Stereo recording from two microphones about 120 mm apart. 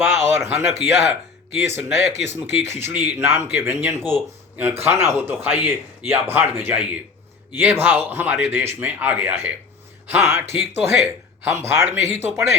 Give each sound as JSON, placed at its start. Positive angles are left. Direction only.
{"t": 0.0, "sound": "speech", "side_deg": -20}